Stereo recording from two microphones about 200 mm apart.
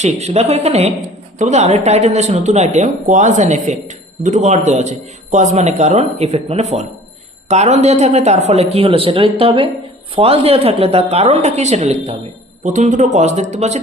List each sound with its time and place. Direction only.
0.0 s speech: 35° right (ahead or behind)